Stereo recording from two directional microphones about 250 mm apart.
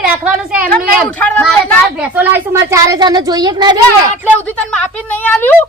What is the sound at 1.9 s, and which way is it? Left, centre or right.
A child's voice, centre.